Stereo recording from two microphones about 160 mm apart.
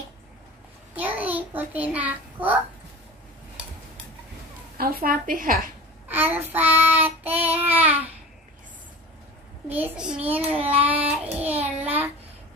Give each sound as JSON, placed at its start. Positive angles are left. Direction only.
{"t": 0.9, "sound": "a sound", "side_deg": -10}
{"t": 1.8, "sound": "child singing", "side_deg": -10}
{"t": 4.7, "sound": "a woman's voice", "side_deg": -70}
{"t": 6.1, "sound": "child singing", "side_deg": -10}
{"t": 9.7, "sound": "child singing", "side_deg": -10}